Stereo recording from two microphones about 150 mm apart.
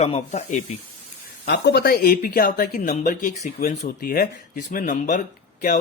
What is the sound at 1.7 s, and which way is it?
Speech, 85° left.